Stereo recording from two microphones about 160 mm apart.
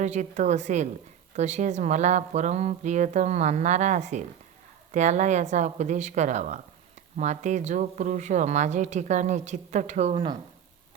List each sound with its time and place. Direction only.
0.0 s speech: 45° right (ahead or behind)